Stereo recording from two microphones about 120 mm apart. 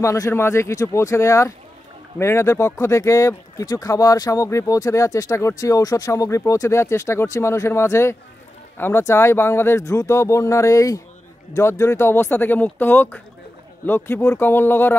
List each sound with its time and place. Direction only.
0.0 s speech: 25° left (ahead or behind)